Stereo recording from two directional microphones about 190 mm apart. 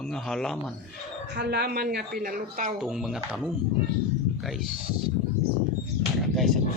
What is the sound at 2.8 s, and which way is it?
Speech, centre (ahead or behind).